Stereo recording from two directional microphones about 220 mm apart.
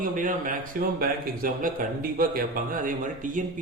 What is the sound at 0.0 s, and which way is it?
A man's voice, 35° right (ahead or behind).